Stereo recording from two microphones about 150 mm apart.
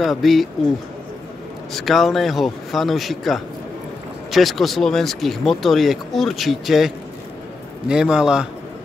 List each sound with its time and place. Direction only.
0.0 s speech: centre (ahead or behind)
1.7 s speech: centre (ahead or behind)
7.9 s speech: 5° right (ahead or behind)